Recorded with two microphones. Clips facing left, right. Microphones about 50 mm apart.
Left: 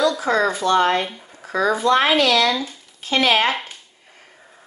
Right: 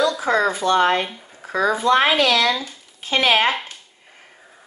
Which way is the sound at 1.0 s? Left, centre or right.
Centre.